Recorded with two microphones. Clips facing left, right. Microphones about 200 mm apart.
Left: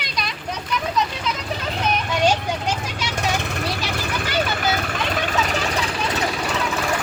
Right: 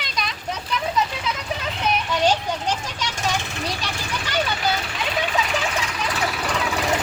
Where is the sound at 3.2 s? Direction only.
60° left (ahead or behind); by 6.1 s 30° left (ahead or behind).